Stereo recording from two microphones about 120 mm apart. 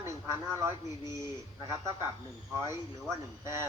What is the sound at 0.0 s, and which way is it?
A man's voice, 20° right (ahead or behind).